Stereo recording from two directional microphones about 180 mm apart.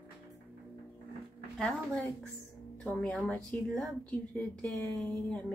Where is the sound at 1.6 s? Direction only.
5° left (ahead or behind).